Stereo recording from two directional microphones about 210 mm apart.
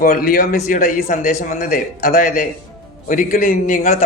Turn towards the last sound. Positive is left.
turn(degrees=40)  # may be behind; listen again after turning